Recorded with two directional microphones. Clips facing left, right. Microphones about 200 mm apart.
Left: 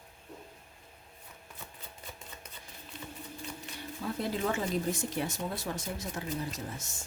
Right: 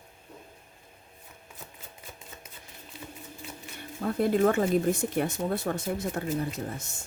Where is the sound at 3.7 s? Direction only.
55° right (ahead or behind).